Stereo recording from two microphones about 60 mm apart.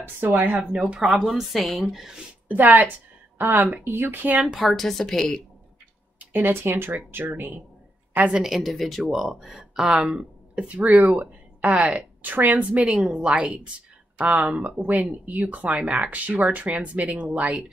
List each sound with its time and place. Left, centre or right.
0.0 s speech: right
0.7 s speech: centre
1.2 s a woman's voice: centre
2.4 s a woman's voice: right
4.2 s speech: right
4.5 s a woman's voice: centre
6.1 s speech: right
8.5 s speech: centre; by 12.9 s right
12.9 s a woman's voice: centre
13.2 s speech: centre